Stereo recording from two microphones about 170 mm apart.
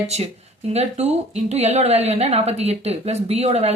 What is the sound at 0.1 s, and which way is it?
Speech, 40° right (ahead or behind).